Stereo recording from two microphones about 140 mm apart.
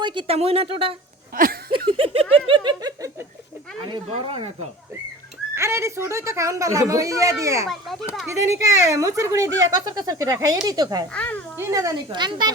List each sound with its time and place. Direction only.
0.0 s speech: 35° right (ahead or behind)
1.3 s a sound: 90° right
1.9 s speech: 40° right (ahead or behind)
4.2 s speech: 35° right (ahead or behind)
5.5 s speech: 20° right (ahead or behind)
7.7 s speech: centre (ahead or behind)
8.3 s speech: 20° right (ahead or behind)
11.1 s a child's voice: 10° left (ahead or behind)
11.6 s speech: 25° right (ahead or behind)